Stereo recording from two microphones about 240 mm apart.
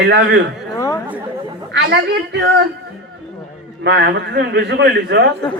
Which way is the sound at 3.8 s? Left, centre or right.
Right.